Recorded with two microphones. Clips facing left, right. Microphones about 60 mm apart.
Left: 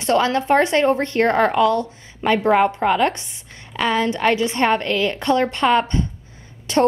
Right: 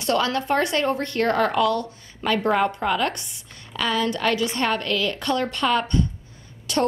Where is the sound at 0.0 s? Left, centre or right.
Left.